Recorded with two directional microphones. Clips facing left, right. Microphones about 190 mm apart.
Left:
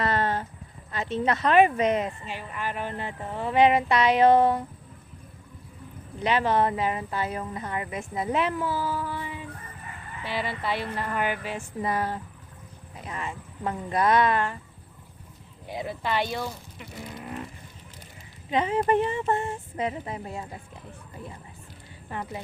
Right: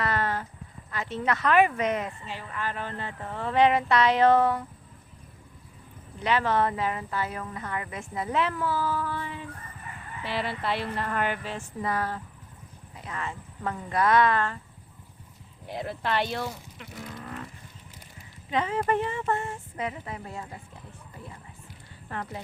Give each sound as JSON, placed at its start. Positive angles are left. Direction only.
{"t": 0.0, "sound": "a sound", "side_deg": 25}
{"t": 0.9, "sound": "speech", "side_deg": 20}
{"t": 6.1, "sound": "speech", "side_deg": 20}
{"t": 10.2, "sound": "speech", "side_deg": 0}
{"t": 15.7, "sound": "speech", "side_deg": 5}
{"t": 17.0, "sound": "vehicle", "side_deg": 15}
{"t": 18.5, "sound": "speech", "side_deg": 20}
{"t": 22.1, "sound": "speech", "side_deg": 15}